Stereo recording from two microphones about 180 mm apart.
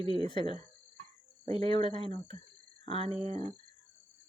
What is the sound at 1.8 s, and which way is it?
Speech, 35° right (ahead or behind).